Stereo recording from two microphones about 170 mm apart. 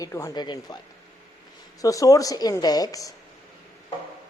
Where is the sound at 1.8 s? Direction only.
20° left (ahead or behind).